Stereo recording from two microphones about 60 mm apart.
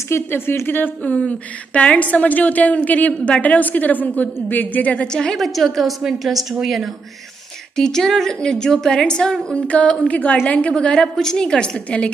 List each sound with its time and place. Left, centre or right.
0.1 s a woman's voice: left
1.0 s a woman's voice: centre
5.4 s a woman's voice: centre